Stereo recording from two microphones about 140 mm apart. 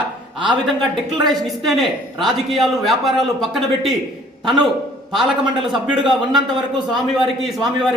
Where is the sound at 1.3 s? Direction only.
Centre (ahead or behind).